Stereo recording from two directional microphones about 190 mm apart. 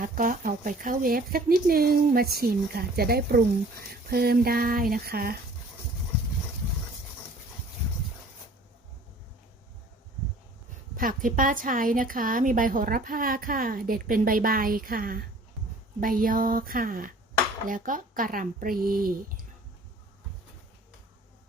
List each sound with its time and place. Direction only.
0.0 s speech: 45° right (ahead or behind)
10.9 s speech: 45° right (ahead or behind)